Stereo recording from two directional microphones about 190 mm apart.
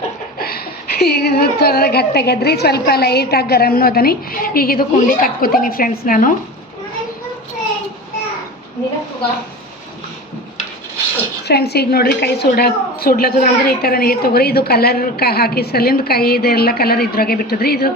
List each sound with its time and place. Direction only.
0.3 s a woman's voice: 55° left (ahead or behind)
11.4 s a woman's voice: 60° left (ahead or behind)